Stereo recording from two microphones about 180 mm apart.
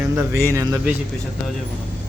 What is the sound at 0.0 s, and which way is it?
Speech, 15° right (ahead or behind).